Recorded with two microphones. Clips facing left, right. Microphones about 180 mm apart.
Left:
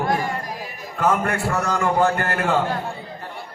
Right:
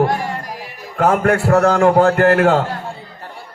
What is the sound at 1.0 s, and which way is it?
A man's voice, 70° right (ahead or behind).